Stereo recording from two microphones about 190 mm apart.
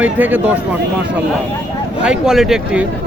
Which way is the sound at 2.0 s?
5° right (ahead or behind).